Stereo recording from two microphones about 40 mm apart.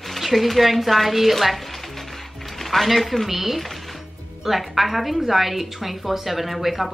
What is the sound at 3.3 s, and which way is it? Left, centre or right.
Speech, centre.